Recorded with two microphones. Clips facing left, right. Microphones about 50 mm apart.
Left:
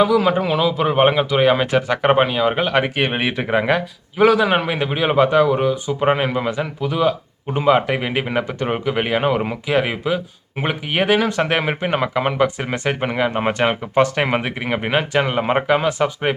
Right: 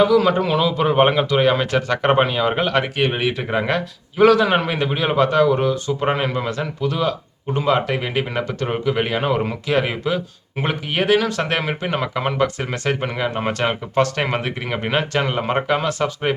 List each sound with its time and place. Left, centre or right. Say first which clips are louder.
0.0 s a man's voice: even; centre
2.8 s speech: even; left
3.5 s a man's voice: left 3 dB; centre